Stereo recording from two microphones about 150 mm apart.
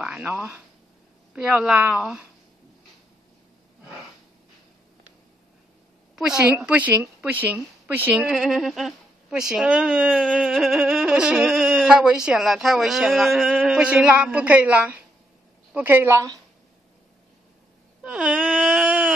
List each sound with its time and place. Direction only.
0.0 s a woman's voice: 5° right (ahead or behind)
6.1 s a woman's voice: 5° right (ahead or behind)
18.0 s a sound: 5° right (ahead or behind)